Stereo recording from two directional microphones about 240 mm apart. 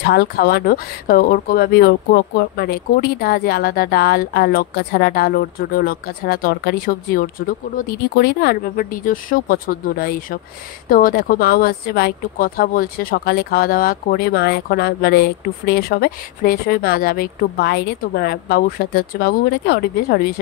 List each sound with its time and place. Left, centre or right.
0.0 s speech: left